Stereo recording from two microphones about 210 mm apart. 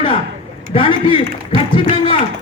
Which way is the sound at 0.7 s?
25° left (ahead or behind).